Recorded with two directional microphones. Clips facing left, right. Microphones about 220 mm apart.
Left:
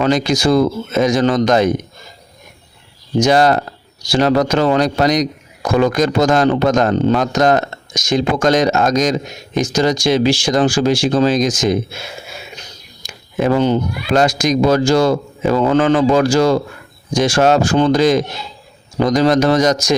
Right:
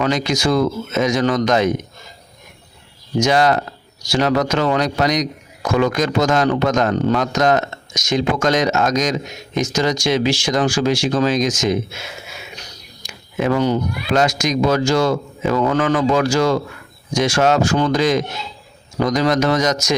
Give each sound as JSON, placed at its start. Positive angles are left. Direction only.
{"t": 0.0, "sound": "a man's voice", "side_deg": 35}
{"t": 3.2, "sound": "a man's voice", "side_deg": 35}